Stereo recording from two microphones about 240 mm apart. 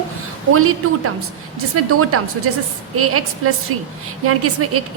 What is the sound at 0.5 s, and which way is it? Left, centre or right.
A woman's voice, right.